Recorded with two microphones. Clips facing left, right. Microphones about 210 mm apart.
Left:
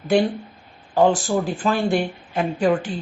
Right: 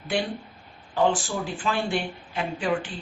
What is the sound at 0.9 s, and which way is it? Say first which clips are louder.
Speech: left 6 dB; 40° left (ahead or behind).